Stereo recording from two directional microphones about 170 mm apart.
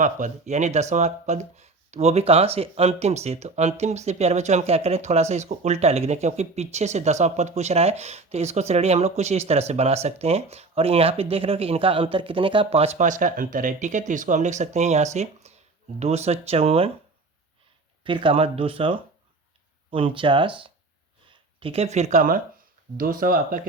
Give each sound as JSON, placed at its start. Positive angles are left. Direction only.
{"t": 0.0, "sound": "speech", "side_deg": -45}
{"t": 18.0, "sound": "speech", "side_deg": -30}